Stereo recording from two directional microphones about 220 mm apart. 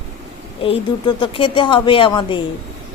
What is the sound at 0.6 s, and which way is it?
A woman's voice, 25° left (ahead or behind).